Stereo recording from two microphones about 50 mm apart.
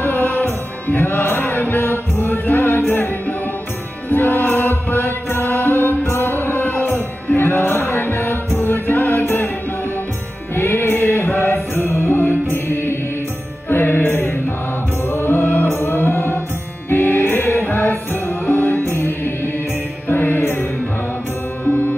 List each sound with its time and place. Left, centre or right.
0.0 s music: left
4.1 s chant: left
8.5 s music: left
10.5 s music: left
12.6 s mantra: left
13.7 s music: left
20.1 s mantra: left